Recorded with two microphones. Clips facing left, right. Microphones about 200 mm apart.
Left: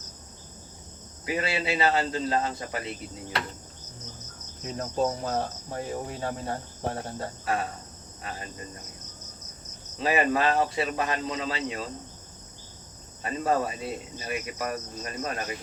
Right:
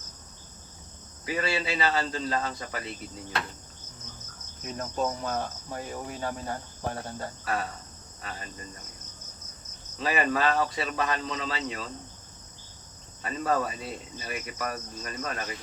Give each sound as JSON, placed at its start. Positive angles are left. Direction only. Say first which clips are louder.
{"t": 1.3, "sound": "cricket", "louder": "left 1 dB", "side_deg": 25}
{"t": 4.6, "sound": "cricket", "louder": "left 3 dB", "side_deg": 30}
{"t": 10.0, "sound": "cricket", "louder": "left 2 dB", "side_deg": 25}
{"t": 13.2, "sound": "cricket", "louder": "left 2 dB", "side_deg": 25}